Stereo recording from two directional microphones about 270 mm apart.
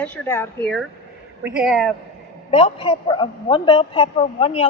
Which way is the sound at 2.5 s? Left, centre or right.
Left.